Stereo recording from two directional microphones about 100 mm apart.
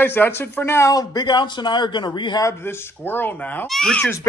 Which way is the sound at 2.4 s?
20° left (ahead or behind).